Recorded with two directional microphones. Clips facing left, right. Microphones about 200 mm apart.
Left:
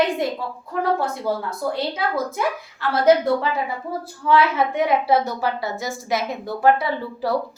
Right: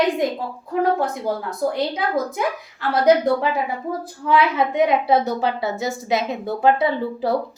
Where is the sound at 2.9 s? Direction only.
15° right (ahead or behind).